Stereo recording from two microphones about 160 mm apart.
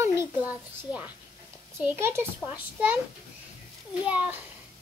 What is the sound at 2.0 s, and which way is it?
A child's voice, 15° right (ahead or behind).